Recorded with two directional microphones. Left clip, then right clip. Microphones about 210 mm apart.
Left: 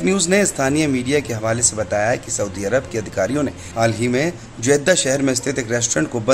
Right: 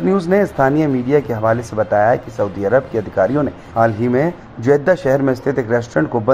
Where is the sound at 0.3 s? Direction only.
10° left (ahead or behind).